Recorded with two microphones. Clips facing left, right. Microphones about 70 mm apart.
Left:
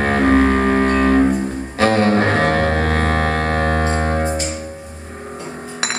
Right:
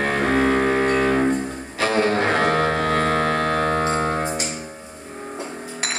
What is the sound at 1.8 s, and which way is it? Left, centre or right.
Music, left.